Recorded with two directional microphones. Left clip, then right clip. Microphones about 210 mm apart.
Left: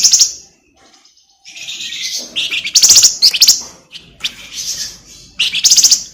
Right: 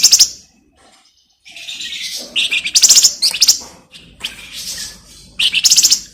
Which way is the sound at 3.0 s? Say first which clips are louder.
Left 4 dB; 10° left (ahead or behind).